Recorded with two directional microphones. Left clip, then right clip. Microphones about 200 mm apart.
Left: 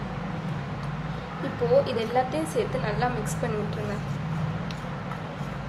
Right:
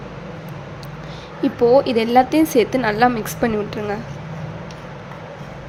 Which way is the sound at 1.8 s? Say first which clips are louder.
Right 10 dB; 55° right (ahead or behind).